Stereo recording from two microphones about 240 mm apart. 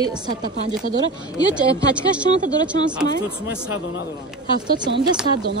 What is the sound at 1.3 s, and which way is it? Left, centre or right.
Speech, centre.